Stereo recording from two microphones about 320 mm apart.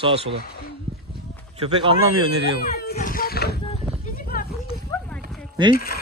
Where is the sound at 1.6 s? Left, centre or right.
Centre.